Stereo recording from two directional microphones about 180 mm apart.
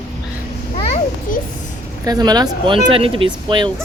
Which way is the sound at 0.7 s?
35° left (ahead or behind).